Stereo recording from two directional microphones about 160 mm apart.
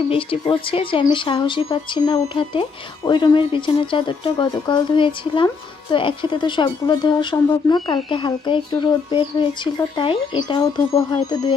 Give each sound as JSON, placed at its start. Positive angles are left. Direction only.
{"t": 0.1, "sound": "a woman's voice", "side_deg": 35}